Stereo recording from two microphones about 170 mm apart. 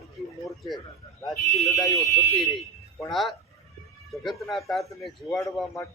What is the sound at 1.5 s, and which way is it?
Speech, centre (ahead or behind).